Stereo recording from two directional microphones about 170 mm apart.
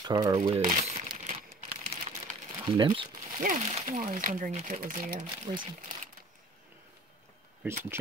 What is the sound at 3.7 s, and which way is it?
Speech, 40° right (ahead or behind).